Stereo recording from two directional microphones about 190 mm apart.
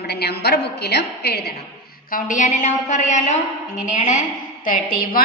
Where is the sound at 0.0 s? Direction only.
60° left (ahead or behind).